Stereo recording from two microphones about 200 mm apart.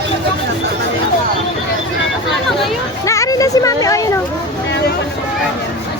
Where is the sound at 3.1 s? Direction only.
15° left (ahead or behind).